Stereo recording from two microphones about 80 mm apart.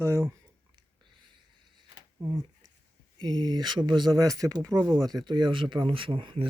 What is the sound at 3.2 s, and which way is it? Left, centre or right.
Speech, right.